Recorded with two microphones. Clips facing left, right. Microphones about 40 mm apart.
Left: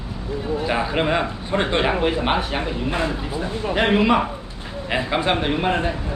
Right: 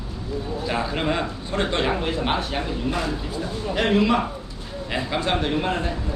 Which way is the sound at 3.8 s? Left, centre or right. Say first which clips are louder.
Left 2 dB; left.